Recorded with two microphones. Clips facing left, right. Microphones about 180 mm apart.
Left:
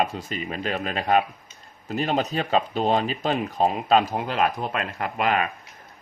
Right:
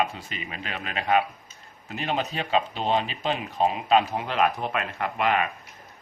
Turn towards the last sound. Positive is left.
turn(degrees=40)  # may be behind; listen again after turning